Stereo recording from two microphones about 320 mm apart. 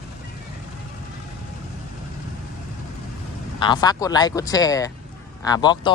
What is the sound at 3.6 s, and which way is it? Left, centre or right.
Speech, centre.